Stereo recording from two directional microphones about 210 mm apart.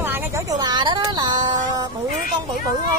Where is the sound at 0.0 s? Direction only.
10° right (ahead or behind).